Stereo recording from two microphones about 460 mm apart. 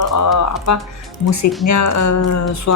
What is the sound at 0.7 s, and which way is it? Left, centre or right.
Speech, left.